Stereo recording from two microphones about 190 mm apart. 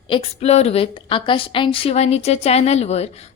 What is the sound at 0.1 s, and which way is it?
A woman's voice, 30° left (ahead or behind).